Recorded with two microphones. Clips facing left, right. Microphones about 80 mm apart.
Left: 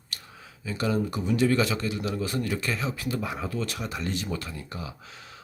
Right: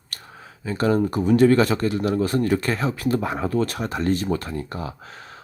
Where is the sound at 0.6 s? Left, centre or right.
Right.